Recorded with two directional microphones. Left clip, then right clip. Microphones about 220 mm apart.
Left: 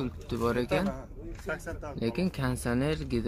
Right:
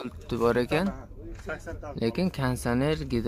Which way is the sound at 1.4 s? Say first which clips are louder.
Even; 45° left (ahead or behind).